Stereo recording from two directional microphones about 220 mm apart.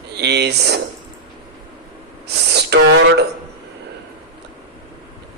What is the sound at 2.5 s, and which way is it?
Speech, 50° right (ahead or behind).